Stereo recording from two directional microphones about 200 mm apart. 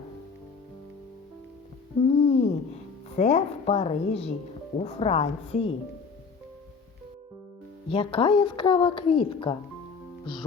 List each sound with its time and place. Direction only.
2.0 s music: 35° left (ahead or behind)
3.2 s a woman's voice: 35° left (ahead or behind)
7.9 s a woman's voice: 25° left (ahead or behind)